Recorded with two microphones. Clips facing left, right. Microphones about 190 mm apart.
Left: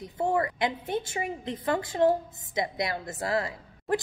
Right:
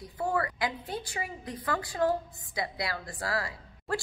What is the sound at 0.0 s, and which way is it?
A woman's voice, 25° left (ahead or behind).